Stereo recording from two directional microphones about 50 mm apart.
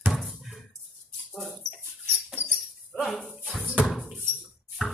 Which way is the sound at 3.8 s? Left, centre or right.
Centre.